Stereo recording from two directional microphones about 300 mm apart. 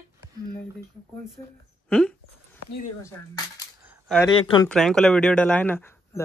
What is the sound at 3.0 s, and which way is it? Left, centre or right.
Speech, centre.